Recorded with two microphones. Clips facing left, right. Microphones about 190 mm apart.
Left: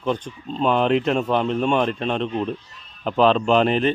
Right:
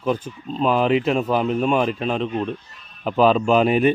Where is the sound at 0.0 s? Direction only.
5° right (ahead or behind).